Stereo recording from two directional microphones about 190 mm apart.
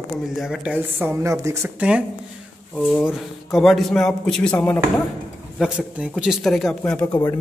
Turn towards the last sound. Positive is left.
turn(degrees=15)  # may be behind; listen again after turning